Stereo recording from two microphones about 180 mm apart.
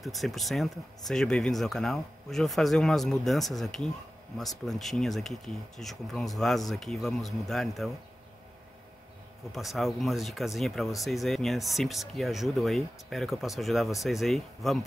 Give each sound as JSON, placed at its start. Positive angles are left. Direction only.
{"t": 0.0, "sound": "speech", "side_deg": 0}
{"t": 9.5, "sound": "speech", "side_deg": 0}